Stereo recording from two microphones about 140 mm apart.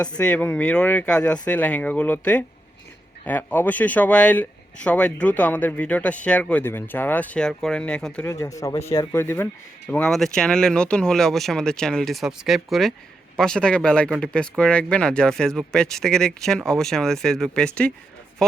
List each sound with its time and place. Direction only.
0.2 s speech: 10° left (ahead or behind)
8.3 s speech: 25° left (ahead or behind); by 17.9 s 5° left (ahead or behind)